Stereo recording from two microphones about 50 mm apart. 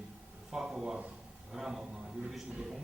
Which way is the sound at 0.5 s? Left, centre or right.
Centre.